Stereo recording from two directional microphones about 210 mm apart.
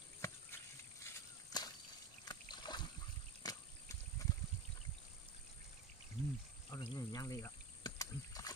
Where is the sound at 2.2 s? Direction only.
20° left (ahead or behind).